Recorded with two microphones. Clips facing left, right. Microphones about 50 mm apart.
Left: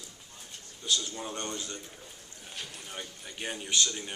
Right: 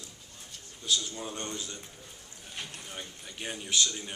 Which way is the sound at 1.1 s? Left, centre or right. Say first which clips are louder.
Left 1 dB; centre.